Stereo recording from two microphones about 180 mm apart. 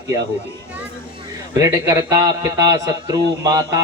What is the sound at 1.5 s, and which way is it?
A man's voice, 20° right (ahead or behind).